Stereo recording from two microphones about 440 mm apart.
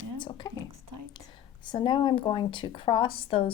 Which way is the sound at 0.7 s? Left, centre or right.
Right.